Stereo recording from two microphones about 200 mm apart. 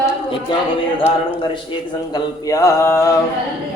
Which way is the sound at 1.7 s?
25° left (ahead or behind).